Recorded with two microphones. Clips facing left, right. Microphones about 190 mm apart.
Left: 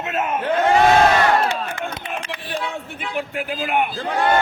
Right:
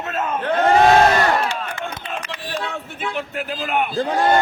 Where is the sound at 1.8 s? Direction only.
15° left (ahead or behind).